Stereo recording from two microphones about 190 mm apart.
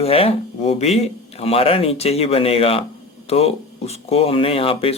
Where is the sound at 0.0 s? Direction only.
30° left (ahead or behind).